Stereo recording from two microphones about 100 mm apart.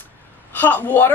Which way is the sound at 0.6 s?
15° left (ahead or behind).